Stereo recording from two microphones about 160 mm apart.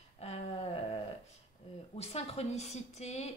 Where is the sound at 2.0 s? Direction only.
40° left (ahead or behind).